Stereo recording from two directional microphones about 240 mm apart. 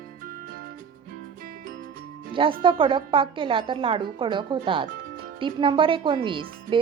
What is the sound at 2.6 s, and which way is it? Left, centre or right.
Speech, centre.